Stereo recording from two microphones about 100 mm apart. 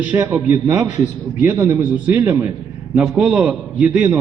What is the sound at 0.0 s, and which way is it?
A man's voice, 20° right (ahead or behind).